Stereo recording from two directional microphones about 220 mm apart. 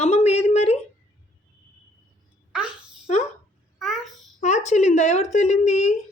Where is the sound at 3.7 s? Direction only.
Centre (ahead or behind).